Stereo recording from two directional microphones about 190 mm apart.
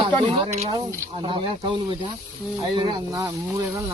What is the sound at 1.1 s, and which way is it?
Speech, 30° right (ahead or behind).